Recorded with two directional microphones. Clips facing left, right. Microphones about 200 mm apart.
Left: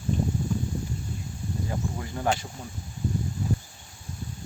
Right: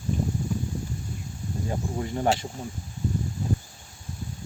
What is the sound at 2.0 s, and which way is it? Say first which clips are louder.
Speech: right 4 dB; 25° right (ahead or behind).